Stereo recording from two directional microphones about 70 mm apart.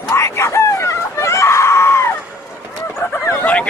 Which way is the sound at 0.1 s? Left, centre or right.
Left.